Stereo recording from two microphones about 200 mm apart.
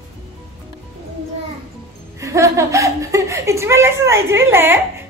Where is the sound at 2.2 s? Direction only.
15° right (ahead or behind).